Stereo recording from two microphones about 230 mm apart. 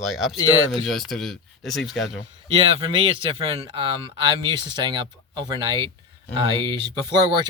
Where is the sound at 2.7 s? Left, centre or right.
Right.